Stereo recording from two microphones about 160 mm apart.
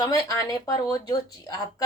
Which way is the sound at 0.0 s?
20° left (ahead or behind).